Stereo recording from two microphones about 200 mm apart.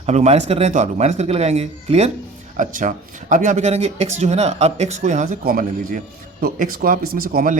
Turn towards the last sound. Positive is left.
turn(degrees=-45)  # may be behind; listen again after turning